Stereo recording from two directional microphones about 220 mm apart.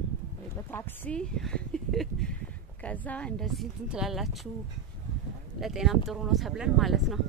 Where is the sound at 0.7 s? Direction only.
10° left (ahead or behind).